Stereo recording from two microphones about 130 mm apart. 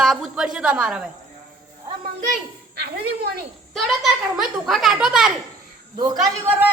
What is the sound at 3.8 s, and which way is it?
A woman's voice, centre (ahead or behind).